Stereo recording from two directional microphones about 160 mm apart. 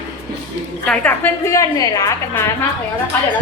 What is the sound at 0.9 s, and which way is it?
A woman's voice, 10° left (ahead or behind).